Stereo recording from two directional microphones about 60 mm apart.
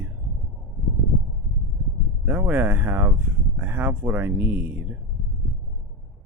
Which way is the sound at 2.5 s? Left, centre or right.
Right.